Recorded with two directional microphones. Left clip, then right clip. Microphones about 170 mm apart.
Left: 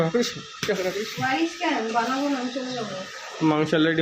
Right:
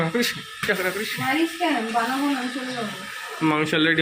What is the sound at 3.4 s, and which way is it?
Speech, 20° left (ahead or behind).